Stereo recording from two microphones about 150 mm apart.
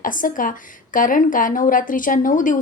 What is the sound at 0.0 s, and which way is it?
A woman's voice, 65° left (ahead or behind).